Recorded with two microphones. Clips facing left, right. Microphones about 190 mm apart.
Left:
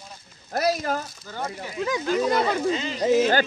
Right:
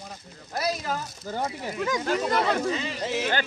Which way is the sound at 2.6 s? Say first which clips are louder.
Left 3 dB; 25° left (ahead or behind).